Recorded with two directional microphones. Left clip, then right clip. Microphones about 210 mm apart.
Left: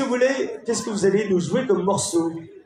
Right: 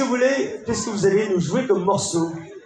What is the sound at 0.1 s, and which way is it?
A man's voice, 50° left (ahead or behind).